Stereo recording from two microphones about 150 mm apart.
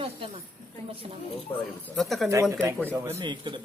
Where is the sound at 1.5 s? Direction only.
20° left (ahead or behind).